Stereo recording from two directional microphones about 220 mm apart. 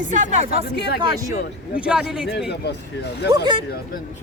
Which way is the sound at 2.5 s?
50° left (ahead or behind).